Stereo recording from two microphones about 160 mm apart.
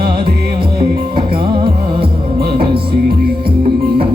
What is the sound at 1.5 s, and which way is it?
Music, 30° right (ahead or behind).